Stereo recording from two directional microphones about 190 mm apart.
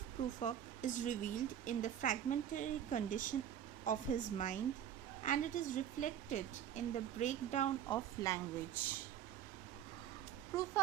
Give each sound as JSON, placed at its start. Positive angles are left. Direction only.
{"t": 0.3, "sound": "speech", "side_deg": 40}
{"t": 7.9, "sound": "speech", "side_deg": 15}
{"t": 10.5, "sound": "speech", "side_deg": 20}